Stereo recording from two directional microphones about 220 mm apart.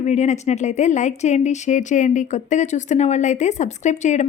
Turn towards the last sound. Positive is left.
turn(degrees=35)  # may be behind; listen again after turning